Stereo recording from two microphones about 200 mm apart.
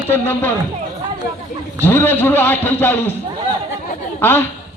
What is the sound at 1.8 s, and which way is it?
A man's voice, 10° left (ahead or behind).